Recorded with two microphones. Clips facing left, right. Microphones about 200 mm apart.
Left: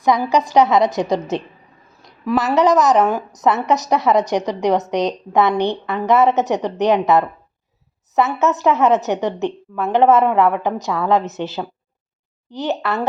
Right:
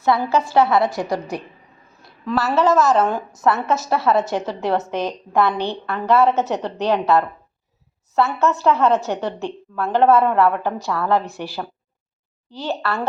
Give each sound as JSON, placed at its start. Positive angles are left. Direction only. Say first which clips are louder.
{"t": 0.0, "sound": "a woman's voice", "louder": "left 2 dB", "side_deg": 15}